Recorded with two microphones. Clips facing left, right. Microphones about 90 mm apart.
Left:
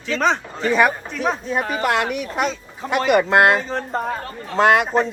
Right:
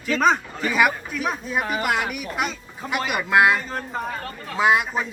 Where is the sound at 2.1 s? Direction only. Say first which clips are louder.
Left 4 dB; 5° right (ahead or behind).